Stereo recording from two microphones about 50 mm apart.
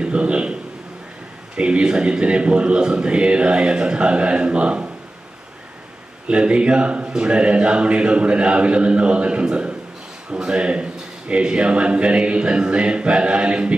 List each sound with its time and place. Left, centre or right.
0.0 s a man's voice: right
1.6 s speech: right
6.2 s speech: right